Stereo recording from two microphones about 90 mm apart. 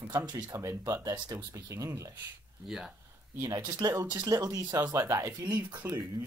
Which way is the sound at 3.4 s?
50° right (ahead or behind).